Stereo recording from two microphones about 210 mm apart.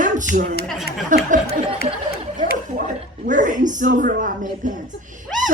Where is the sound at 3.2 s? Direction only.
35° right (ahead or behind).